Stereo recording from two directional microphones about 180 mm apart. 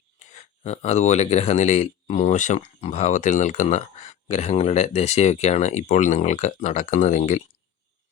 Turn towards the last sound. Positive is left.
turn(degrees=40)  # may be behind; listen again after turning